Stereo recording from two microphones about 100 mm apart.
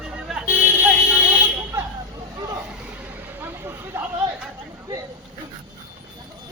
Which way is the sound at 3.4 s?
25° right (ahead or behind).